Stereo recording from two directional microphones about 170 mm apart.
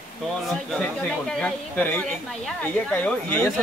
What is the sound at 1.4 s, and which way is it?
Speech, 10° left (ahead or behind).